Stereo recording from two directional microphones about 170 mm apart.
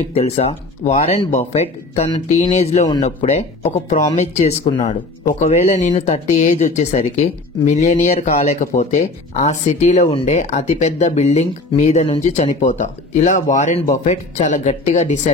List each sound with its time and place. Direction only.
0.1 s speech: 35° left (ahead or behind)
3.9 s speech: 45° left (ahead or behind)
5.2 s speech: 55° left (ahead or behind)
5.9 s speech: 40° left (ahead or behind)